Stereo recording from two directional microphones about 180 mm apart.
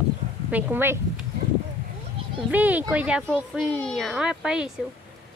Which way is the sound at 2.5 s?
10° right (ahead or behind).